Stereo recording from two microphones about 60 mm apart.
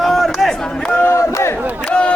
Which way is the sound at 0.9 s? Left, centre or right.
Left.